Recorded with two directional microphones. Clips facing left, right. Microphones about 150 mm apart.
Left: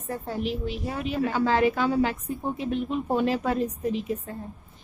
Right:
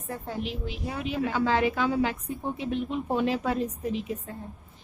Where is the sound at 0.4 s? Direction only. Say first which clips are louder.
Left 4 dB; 45° left (ahead or behind).